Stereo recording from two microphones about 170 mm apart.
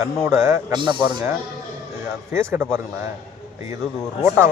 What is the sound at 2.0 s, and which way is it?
Speech, 15° right (ahead or behind).